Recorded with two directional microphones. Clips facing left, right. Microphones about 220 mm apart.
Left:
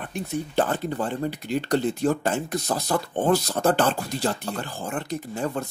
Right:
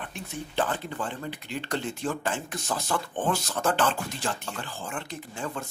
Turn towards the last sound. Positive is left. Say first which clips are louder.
# left 7 dB
turn(degrees=40)  # may be behind; listen again after turning